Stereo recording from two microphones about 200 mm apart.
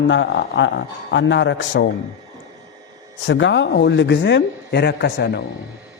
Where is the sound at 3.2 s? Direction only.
65° left (ahead or behind).